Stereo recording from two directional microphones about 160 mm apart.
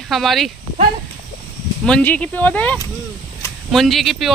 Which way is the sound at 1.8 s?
5° left (ahead or behind).